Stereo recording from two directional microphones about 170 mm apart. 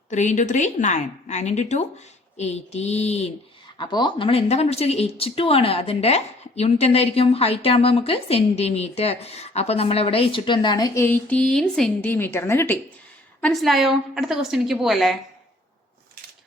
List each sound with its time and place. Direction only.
0.1 s a woman's voice: 45° left (ahead or behind)
3.8 s speech: 30° left (ahead or behind); by 12.8 s 15° left (ahead or behind)
13.4 s a woman's voice: centre (ahead or behind)